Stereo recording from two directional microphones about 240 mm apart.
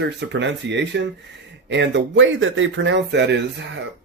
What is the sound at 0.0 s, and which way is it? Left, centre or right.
Speech, right.